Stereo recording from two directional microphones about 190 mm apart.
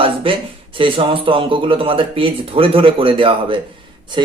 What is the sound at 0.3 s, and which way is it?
Speech, 30° right (ahead or behind).